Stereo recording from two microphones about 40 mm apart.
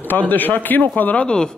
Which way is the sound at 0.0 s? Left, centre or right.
Left.